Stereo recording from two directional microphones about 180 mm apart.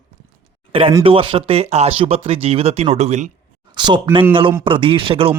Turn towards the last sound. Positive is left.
turn(degrees=-30)  # may be behind; listen again after turning